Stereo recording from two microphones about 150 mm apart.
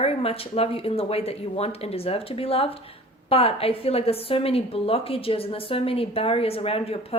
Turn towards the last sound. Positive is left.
turn(degrees=40)  # may be behind; listen again after turning